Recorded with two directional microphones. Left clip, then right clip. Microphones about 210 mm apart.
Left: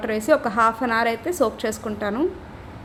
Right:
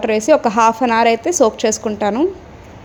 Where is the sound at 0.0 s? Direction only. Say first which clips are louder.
Right 7 dB; 25° right (ahead or behind).